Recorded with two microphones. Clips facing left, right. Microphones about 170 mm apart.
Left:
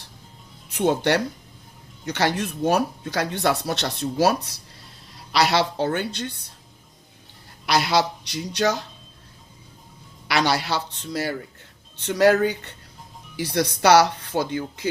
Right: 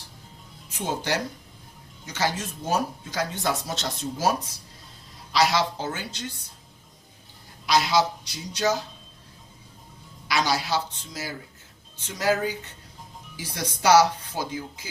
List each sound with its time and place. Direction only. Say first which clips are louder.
0.7 s speech: left 8 dB; 65° left (ahead or behind)
7.7 s speech: left 1 dB; 65° left (ahead or behind)
10.2 s speech: left 3 dB; 65° left (ahead or behind)